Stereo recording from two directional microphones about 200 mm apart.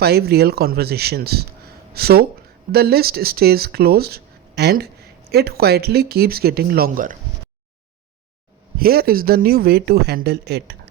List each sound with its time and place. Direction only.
0.0 s speech: 50° right (ahead or behind)
8.8 s speech: 50° right (ahead or behind)